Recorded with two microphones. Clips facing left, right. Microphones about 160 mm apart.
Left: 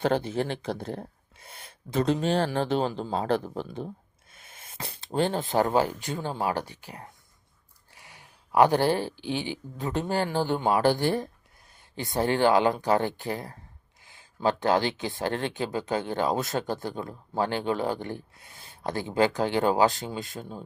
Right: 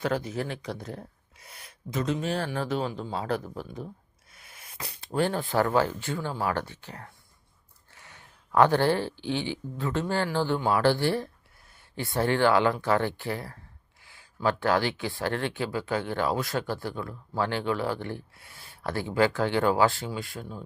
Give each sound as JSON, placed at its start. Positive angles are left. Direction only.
{"t": 0.0, "sound": "speech", "side_deg": 30}